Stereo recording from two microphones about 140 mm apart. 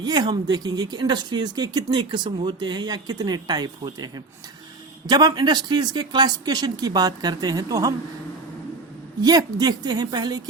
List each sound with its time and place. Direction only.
0.0 s speech: 30° right (ahead or behind)
9.2 s speech: 25° right (ahead or behind)